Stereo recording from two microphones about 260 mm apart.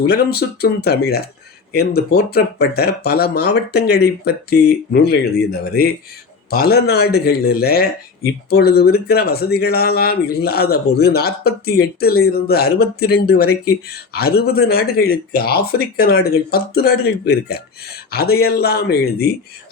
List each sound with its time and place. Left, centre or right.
0.0 s speech: left